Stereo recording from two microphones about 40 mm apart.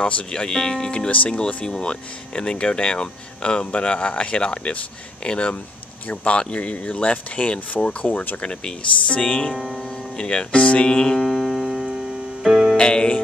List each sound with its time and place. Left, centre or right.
0.0 s speech: left
0.3 s speech: centre
1.3 s speech: left
9.6 s speech: centre
9.8 s speech: left
10.9 s speech: centre
11.1 s music: centre
11.8 s keyboard: centre
12.7 s music: left